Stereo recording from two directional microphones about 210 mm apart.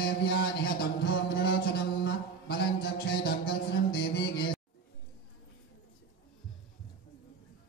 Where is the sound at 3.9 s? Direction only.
50° left (ahead or behind).